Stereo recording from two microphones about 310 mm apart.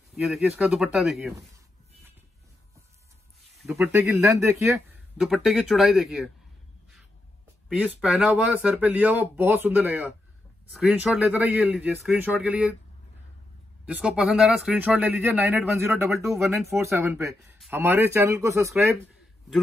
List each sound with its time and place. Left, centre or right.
0.1 s speech: centre
3.6 s speech: centre
7.7 s speech: centre
13.8 s a man's voice: centre